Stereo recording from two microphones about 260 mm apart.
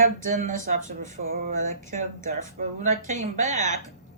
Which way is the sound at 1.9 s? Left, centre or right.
Right.